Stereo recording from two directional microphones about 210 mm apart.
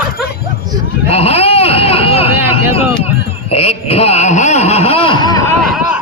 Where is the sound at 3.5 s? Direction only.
30° left (ahead or behind).